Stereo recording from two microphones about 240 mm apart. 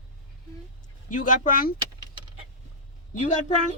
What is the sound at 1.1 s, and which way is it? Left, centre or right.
Speech, left.